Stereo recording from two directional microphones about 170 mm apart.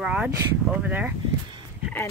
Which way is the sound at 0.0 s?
5° right (ahead or behind).